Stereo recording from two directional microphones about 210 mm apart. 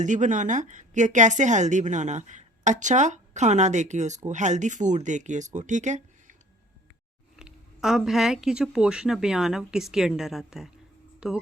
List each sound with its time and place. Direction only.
0.0 s a woman's voice: 35° right (ahead or behind)
7.3 s speech: 5° right (ahead or behind)